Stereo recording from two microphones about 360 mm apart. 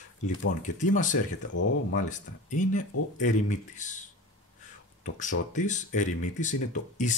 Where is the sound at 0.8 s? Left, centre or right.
Left.